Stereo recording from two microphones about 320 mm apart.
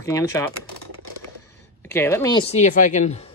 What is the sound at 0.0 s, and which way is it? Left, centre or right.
Speech, centre.